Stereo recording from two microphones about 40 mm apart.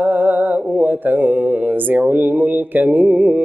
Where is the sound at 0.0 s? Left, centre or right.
Right.